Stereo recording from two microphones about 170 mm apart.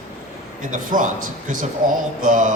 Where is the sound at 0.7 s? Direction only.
50° right (ahead or behind).